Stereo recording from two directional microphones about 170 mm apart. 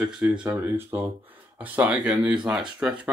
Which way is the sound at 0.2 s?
5° right (ahead or behind).